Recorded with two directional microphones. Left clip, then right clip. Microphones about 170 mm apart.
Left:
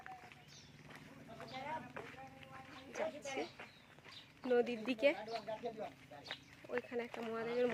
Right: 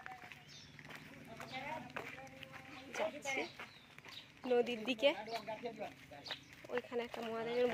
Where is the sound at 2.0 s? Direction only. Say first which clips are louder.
Right 4 dB; 75° right (ahead or behind).